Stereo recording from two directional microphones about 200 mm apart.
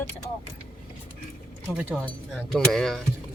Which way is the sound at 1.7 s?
5° right (ahead or behind).